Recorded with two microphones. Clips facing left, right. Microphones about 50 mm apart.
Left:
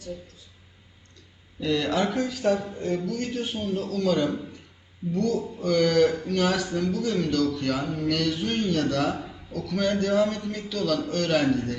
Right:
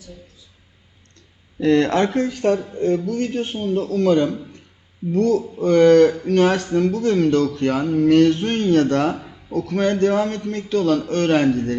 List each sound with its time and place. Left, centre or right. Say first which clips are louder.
1.5 s a man's voice: right 8 dB; right
5.6 s a man's voice: right 9 dB; right